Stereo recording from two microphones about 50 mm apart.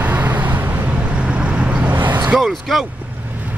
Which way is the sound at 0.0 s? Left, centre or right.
Right.